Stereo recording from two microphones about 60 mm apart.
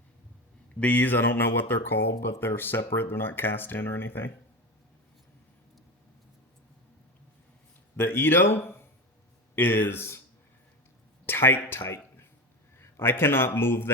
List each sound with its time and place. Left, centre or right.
0.8 s speech: left
7.9 s speech: left
11.3 s speech: left